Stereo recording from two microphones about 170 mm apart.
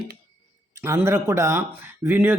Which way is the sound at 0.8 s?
15° right (ahead or behind).